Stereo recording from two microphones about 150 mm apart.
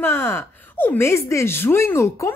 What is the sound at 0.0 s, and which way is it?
Speech, 15° left (ahead or behind).